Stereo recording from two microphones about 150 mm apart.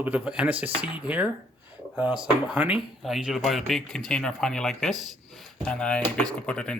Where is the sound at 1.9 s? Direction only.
10° right (ahead or behind).